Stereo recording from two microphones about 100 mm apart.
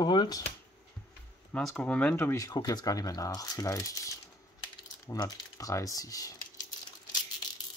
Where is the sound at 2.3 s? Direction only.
35° left (ahead or behind).